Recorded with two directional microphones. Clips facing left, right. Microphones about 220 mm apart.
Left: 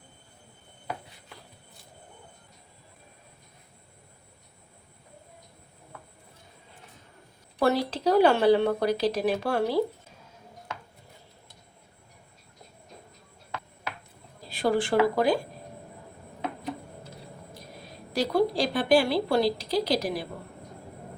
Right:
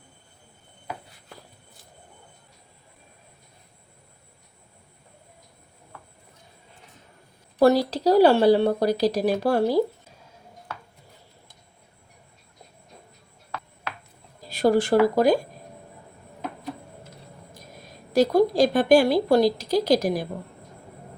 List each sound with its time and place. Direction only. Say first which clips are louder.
7.6 s speech: right 6 dB; 40° right (ahead or behind)
14.5 s speech: right 5 dB; 40° right (ahead or behind)
17.5 s a woman's voice: left 1 dB; 45° right (ahead or behind)